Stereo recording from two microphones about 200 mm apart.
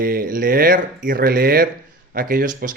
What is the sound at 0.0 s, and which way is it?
Speech, 45° right (ahead or behind).